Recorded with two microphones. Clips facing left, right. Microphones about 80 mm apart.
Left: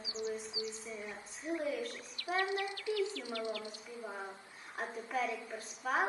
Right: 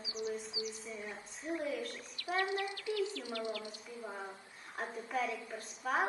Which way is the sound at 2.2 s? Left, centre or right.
Left.